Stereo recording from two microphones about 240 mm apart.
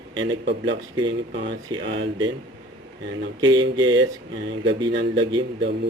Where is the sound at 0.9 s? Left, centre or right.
Centre.